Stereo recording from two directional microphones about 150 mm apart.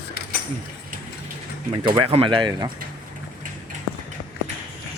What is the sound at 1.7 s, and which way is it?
Speech, 35° right (ahead or behind).